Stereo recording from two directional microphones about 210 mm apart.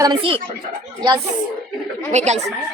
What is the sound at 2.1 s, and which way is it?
Speech, 35° right (ahead or behind).